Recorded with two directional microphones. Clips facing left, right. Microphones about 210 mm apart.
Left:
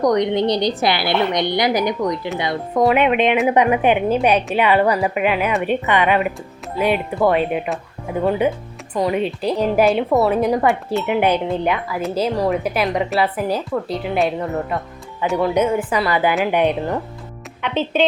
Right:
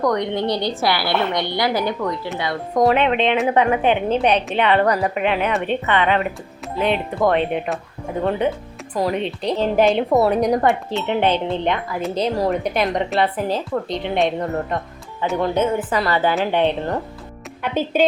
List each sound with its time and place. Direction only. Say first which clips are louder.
0.0 s a woman's voice: left 4 dB; 20° left (ahead or behind)
17.6 s speech: even; 5° right (ahead or behind)